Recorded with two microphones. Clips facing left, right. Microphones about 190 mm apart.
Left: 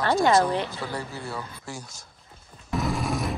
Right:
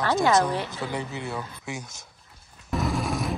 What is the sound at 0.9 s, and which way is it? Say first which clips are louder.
Speech: right 2 dB; 20° right (ahead or behind).